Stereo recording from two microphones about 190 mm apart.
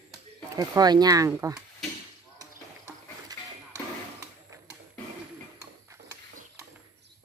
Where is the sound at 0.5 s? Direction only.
20° right (ahead or behind).